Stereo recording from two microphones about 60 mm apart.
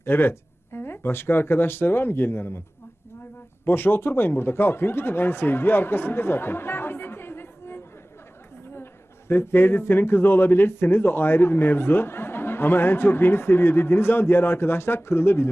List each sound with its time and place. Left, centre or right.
0.0 s speech: left
3.7 s speech: left